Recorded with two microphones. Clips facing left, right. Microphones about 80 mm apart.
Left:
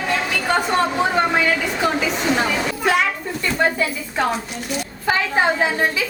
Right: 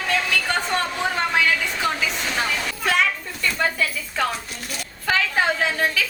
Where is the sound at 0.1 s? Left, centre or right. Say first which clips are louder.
Left 2 dB; centre.